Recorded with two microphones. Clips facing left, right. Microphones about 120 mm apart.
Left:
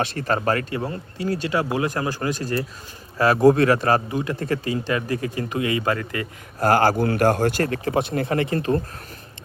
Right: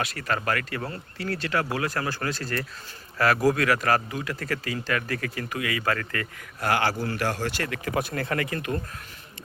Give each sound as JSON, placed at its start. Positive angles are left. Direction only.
{"t": 0.0, "sound": "a man's voice", "side_deg": 30}
{"t": 0.8, "sound": "a man's voice", "side_deg": 15}
{"t": 6.6, "sound": "speech", "side_deg": 40}
{"t": 7.7, "sound": "a man's voice", "side_deg": 25}